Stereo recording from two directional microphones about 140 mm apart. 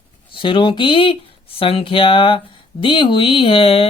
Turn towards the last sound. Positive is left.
turn(degrees=40)  # may be behind; listen again after turning